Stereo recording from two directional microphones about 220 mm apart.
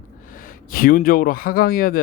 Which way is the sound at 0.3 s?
40° left (ahead or behind).